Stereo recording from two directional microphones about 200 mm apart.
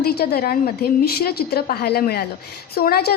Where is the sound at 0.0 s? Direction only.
50° left (ahead or behind).